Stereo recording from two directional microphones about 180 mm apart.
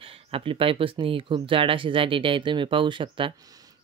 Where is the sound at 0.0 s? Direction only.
30° right (ahead or behind).